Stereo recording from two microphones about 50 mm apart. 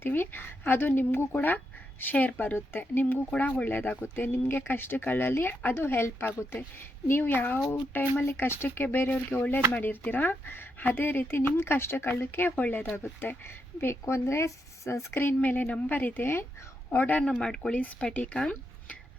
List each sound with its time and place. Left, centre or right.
0.0 s a woman's voice: left
2.7 s speech: left
3.2 s a woman's voice: left
12.5 s a woman's voice: left
14.0 s speech: left
15.1 s speech: left
15.4 s a woman's voice: left
16.9 s a woman's voice: left
17.4 s speech: centre
18.0 s speech: left